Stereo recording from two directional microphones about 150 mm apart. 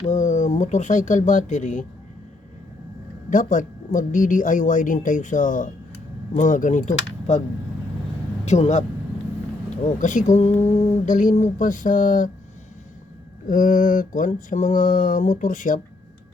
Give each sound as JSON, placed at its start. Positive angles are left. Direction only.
{"t": 0.0, "sound": "speech", "side_deg": 55}
{"t": 3.2, "sound": "speech", "side_deg": 60}
{"t": 8.4, "sound": "speech", "side_deg": 50}
{"t": 13.5, "sound": "speech", "side_deg": 65}